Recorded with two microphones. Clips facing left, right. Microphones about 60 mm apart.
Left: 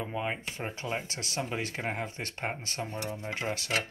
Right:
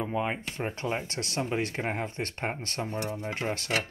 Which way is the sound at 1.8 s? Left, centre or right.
Right.